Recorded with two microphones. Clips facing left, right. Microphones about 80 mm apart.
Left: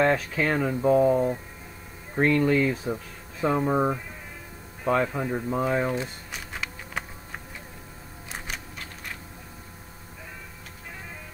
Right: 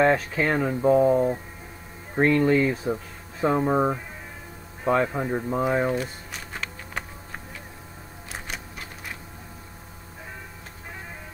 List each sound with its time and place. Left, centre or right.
0.0 s speech: centre
5.0 s speech: right
5.5 s speech: centre
6.0 s insect: centre
8.3 s a sound: centre